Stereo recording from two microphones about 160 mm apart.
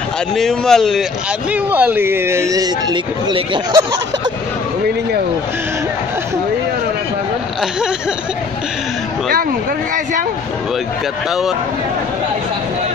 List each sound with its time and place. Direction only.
0.4 s speech: centre (ahead or behind)
1.5 s speech: 10° right (ahead or behind); by 3.8 s 25° right (ahead or behind)